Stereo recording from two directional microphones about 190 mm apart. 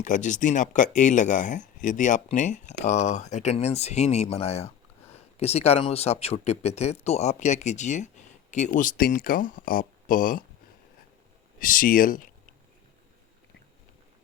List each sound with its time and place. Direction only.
0.0 s speech: 40° left (ahead or behind)
11.6 s speech: 45° left (ahead or behind)